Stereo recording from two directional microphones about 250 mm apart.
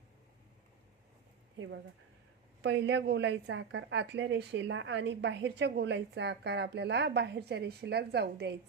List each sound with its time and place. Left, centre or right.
1.5 s a woman's voice: right